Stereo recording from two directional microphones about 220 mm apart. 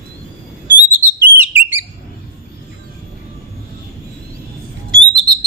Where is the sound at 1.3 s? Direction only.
10° right (ahead or behind).